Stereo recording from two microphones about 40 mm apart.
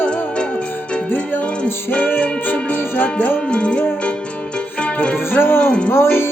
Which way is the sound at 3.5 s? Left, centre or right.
Left.